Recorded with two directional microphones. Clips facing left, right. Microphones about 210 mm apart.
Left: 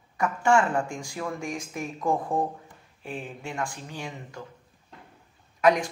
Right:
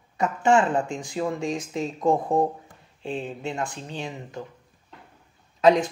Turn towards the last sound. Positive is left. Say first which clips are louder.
# right 3 dB
turn(degrees=-25)  # may be behind; listen again after turning